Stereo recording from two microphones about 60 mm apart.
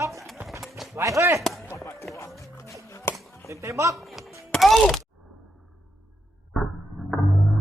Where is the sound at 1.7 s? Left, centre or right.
Left.